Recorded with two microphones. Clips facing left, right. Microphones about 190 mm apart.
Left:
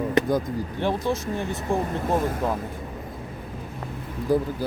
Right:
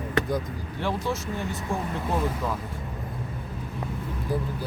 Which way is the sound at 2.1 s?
45° left (ahead or behind).